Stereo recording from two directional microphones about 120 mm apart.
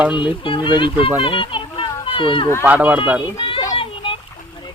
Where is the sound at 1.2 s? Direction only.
45° left (ahead or behind).